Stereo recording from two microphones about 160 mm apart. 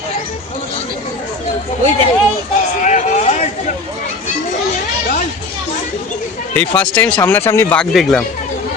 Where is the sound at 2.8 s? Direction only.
45° left (ahead or behind).